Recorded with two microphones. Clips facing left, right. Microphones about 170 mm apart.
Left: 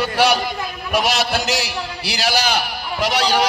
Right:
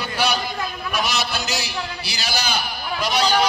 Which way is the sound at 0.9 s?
90° left.